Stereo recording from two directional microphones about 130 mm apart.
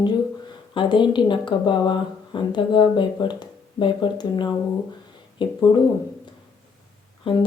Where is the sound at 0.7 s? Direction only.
40° left (ahead or behind).